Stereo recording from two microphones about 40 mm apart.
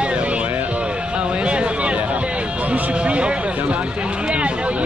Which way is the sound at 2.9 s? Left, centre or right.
Right.